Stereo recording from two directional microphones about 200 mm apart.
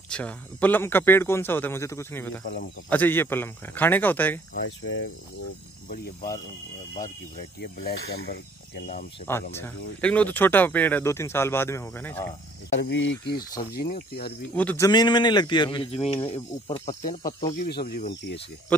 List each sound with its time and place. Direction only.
0.1 s speech: 5° left (ahead or behind)
2.4 s speech: 45° left (ahead or behind)
2.9 s speech: 10° left (ahead or behind)
4.8 s speech: 70° left (ahead or behind)
5.9 s speech: 40° left (ahead or behind)
9.3 s speech: 10° left (ahead or behind)
12.7 s speech: 65° left (ahead or behind)
13.7 s speech: 50° left (ahead or behind)
14.5 s speech: 5° left (ahead or behind)
14.9 s a man's voice: 20° left (ahead or behind)
17.6 s speech: 55° left (ahead or behind)
18.7 s speech: 5° left (ahead or behind)